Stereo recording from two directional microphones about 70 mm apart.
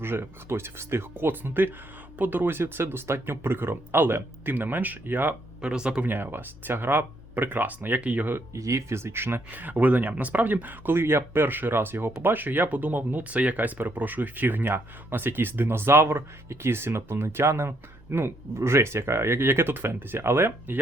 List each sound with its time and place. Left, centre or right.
0.0 s speech: right
5.6 s speech: centre
6.1 s speech: right
8.5 s speech: right